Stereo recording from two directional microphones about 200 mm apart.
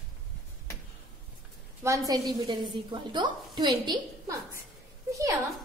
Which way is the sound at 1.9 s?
20° right (ahead or behind).